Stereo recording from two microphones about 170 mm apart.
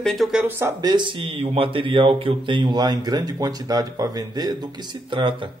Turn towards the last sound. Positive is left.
turn(degrees=-30)  # may be behind; listen again after turning